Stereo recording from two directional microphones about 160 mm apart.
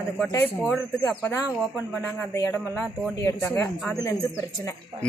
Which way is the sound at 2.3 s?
20° left (ahead or behind).